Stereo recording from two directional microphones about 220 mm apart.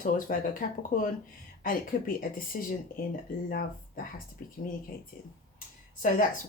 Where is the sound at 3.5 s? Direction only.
40° left (ahead or behind).